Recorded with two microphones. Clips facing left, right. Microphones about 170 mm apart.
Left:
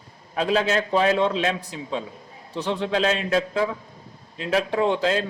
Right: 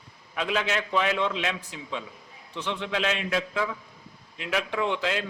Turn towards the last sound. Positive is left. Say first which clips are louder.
# left 6 dB
turn(degrees=35)  # may be behind; listen again after turning